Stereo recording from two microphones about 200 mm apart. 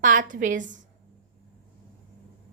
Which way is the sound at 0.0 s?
40° right (ahead or behind).